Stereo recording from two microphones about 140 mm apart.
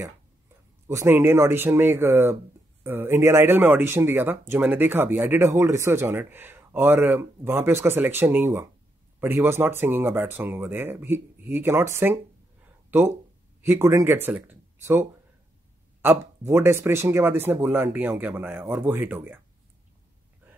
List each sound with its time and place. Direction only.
0.8 s speech: 15° right (ahead or behind)
13.6 s speech: 20° right (ahead or behind)